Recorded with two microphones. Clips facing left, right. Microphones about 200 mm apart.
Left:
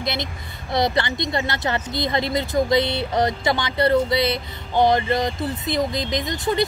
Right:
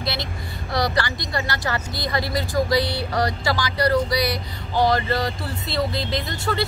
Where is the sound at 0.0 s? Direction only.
20° left (ahead or behind).